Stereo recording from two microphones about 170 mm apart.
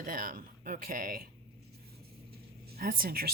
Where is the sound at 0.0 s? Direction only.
55° right (ahead or behind).